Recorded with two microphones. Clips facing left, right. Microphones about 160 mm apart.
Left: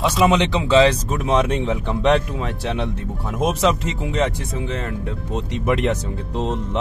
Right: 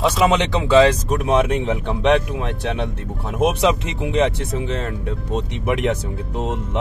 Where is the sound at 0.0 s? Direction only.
Centre (ahead or behind).